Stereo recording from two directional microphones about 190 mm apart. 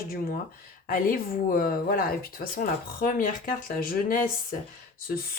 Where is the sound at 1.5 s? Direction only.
50° left (ahead or behind).